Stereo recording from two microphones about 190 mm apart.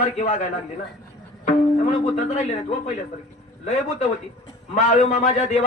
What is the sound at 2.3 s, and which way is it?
Speech, 35° left (ahead or behind).